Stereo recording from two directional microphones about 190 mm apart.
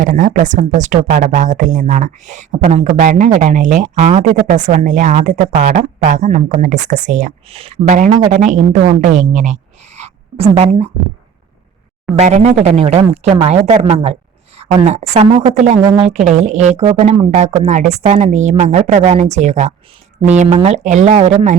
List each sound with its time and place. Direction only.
0.0 s speech: 45° right (ahead or behind)
12.1 s a woman's voice: 35° right (ahead or behind)